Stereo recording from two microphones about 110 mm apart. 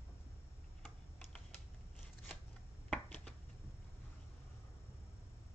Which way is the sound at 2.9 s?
10° left (ahead or behind).